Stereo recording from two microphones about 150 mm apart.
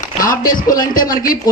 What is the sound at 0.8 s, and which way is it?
Speech, 70° left (ahead or behind).